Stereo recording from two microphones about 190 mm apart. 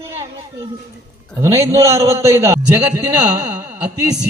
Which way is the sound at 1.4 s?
15° right (ahead or behind).